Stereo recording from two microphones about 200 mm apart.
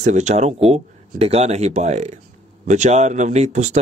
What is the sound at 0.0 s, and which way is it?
Speech, 35° right (ahead or behind).